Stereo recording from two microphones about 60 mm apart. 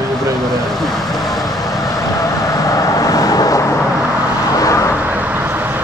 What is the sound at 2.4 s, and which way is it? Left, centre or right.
Vehicle, left.